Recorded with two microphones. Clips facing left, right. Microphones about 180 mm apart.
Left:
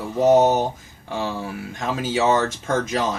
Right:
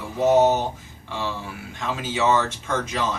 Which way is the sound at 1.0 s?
45° left (ahead or behind).